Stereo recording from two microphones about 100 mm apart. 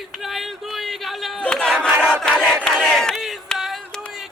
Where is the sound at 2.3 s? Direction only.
5° left (ahead or behind).